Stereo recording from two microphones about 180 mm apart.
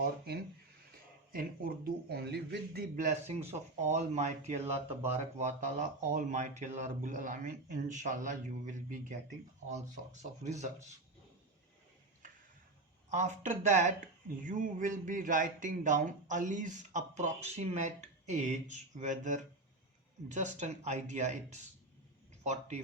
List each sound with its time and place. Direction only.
0.0 s a man's voice: 60° right (ahead or behind)
3.2 s speech: 35° right (ahead or behind)
10.4 s speech: 40° right (ahead or behind)
13.1 s speech: 40° right (ahead or behind)